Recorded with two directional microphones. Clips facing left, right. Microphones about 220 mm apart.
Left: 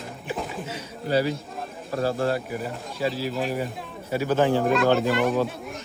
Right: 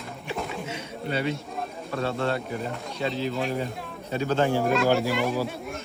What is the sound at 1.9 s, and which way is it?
Speech, 30° left (ahead or behind).